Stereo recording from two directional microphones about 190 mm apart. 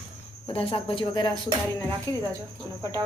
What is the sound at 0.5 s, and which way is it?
Speech, 30° left (ahead or behind).